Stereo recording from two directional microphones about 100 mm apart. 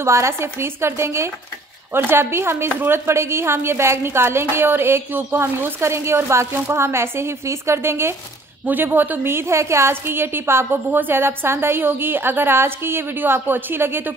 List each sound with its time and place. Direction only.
0.0 s a woman's voice: 30° right (ahead or behind)